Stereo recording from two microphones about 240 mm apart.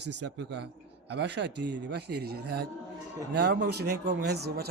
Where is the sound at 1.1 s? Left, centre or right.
Right.